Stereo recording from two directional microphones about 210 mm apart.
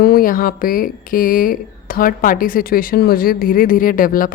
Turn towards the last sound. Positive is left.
turn(degrees=40)  # may be behind; listen again after turning